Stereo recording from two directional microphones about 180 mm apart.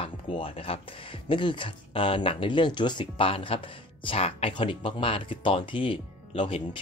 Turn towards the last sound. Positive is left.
turn(degrees=30)  # may be behind; listen again after turning